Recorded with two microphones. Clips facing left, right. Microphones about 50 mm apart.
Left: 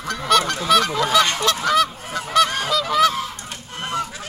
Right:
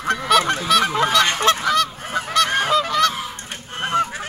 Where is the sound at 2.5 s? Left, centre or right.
Right.